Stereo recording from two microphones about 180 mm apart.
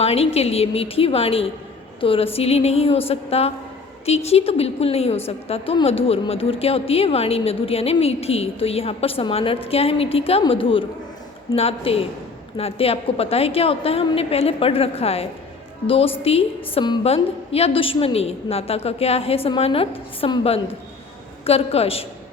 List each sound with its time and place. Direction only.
0.0 s a woman's voice: 35° left (ahead or behind)